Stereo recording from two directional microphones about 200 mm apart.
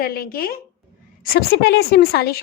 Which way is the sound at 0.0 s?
50° left (ahead or behind).